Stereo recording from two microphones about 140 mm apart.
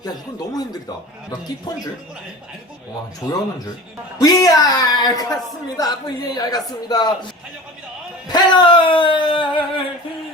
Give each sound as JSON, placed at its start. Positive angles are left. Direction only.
{"t": 0.0, "sound": "a man's voice", "side_deg": 30}
{"t": 4.2, "sound": "a man's voice", "side_deg": 25}
{"t": 8.3, "sound": "speech", "side_deg": 35}